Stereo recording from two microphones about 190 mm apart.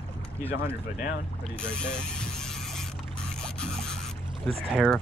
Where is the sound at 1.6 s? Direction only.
5° left (ahead or behind).